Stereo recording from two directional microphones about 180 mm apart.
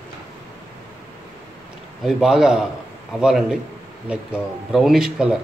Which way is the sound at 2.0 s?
5° right (ahead or behind).